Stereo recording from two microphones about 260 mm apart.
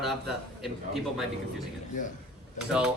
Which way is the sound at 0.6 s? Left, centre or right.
Centre.